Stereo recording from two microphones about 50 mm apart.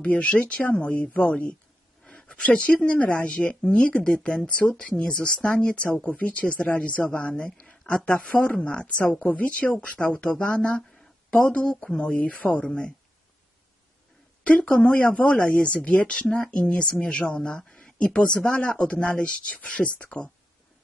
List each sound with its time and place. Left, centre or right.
0.0 s speech: left
6.0 s speech: left
12.2 s speech: left
14.4 s speech: left